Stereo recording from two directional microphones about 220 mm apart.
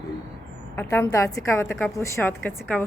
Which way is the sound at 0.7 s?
10° left (ahead or behind).